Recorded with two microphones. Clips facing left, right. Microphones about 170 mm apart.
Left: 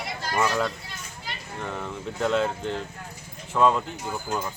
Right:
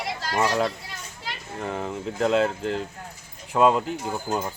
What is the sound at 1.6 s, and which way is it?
Speech, 35° right (ahead or behind).